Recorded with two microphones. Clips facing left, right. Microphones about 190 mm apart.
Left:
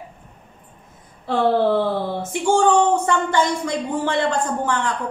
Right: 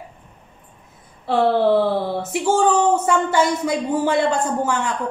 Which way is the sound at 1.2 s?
5° right (ahead or behind).